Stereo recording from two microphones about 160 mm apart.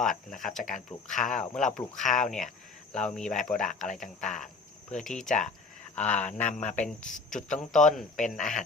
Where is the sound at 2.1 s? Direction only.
50° left (ahead or behind).